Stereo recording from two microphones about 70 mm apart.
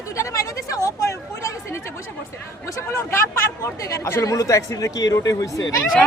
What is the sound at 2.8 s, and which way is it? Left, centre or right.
Speech, left.